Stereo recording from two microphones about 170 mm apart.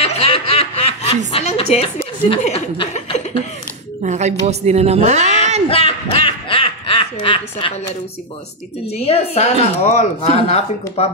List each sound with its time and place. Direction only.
0.0 s snicker: 35° left (ahead or behind)
2.2 s chuckle: 35° left (ahead or behind)
4.0 s a woman's voice: 45° right (ahead or behind)
5.7 s a sound: 35° left (ahead or behind)
8.9 s a woman's voice: 35° left (ahead or behind)